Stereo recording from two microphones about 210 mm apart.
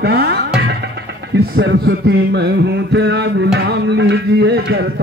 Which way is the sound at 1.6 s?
55° right (ahead or behind).